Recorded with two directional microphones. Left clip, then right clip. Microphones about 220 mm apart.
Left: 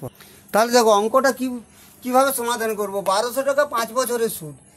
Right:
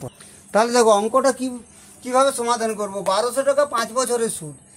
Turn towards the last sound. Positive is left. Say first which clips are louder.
# even
turn(degrees=15)  # may be behind; listen again after turning